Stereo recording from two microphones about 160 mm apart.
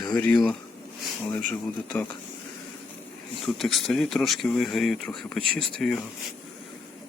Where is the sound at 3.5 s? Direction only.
Centre (ahead or behind).